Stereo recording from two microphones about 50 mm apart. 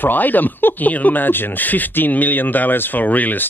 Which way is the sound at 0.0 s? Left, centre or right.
Left.